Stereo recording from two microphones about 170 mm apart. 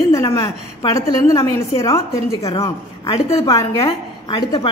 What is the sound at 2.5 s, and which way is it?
A woman's voice, 30° left (ahead or behind).